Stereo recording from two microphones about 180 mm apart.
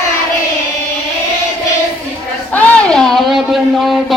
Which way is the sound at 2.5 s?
5° left (ahead or behind).